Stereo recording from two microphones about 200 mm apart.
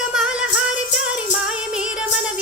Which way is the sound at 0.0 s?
5° right (ahead or behind).